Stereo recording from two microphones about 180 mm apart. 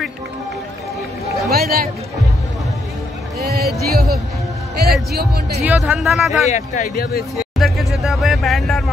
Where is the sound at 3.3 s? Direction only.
60° right (ahead or behind).